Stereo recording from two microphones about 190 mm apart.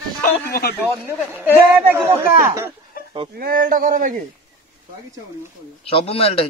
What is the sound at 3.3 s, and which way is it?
Speech, 50° right (ahead or behind).